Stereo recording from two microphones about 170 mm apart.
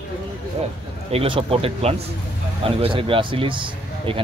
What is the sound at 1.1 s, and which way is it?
Speech, 35° right (ahead or behind).